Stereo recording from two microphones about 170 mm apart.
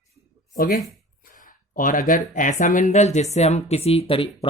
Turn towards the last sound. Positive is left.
turn(degrees=35)  # may be behind; listen again after turning